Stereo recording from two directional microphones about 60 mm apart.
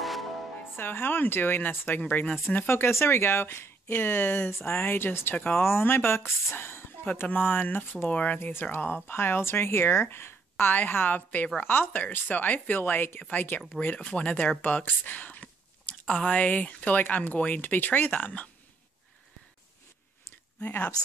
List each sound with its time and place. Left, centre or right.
0.0 s music: centre
0.7 s speech: left
2.0 s speech: left
2.5 s speech: left
5.6 s speech: left
8.4 s speech: left
16.1 s speech: centre
20.6 s speech: left